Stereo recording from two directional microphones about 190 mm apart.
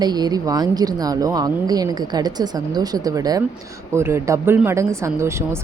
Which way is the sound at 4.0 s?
15° right (ahead or behind).